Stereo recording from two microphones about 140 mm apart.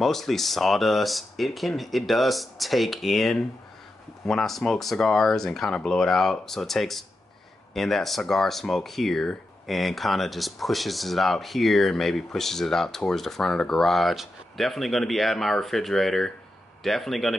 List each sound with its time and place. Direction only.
0.0 s speech: centre (ahead or behind)